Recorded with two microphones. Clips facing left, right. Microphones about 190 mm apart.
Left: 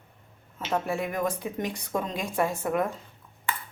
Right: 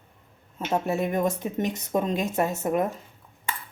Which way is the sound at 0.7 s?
25° right (ahead or behind).